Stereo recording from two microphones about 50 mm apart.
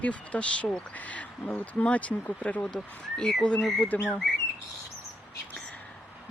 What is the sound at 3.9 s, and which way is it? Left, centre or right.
Speech, left.